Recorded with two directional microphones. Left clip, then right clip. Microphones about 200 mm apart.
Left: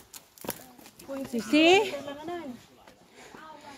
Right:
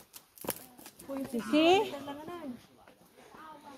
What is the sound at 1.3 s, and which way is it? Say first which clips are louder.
Speech: left 5 dB; 25° left (ahead or behind).